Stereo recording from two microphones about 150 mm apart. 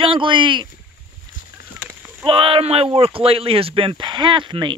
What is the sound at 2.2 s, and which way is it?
Speech, 35° right (ahead or behind).